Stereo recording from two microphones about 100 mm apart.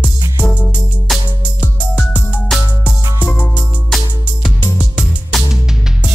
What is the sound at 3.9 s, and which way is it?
Music, 5° left (ahead or behind).